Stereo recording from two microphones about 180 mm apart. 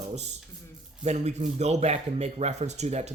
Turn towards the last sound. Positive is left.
turn(degrees=-40)  # may be behind; listen again after turning